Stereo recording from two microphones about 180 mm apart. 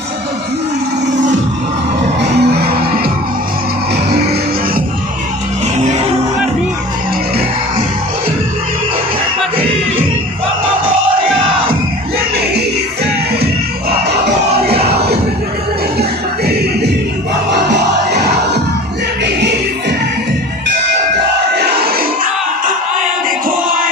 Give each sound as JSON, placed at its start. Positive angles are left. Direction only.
{"t": 2.1, "sound": "music", "side_deg": -65}
{"t": 5.7, "sound": "music", "side_deg": -40}
{"t": 17.5, "sound": "music", "side_deg": -70}
{"t": 21.5, "sound": "music", "side_deg": -65}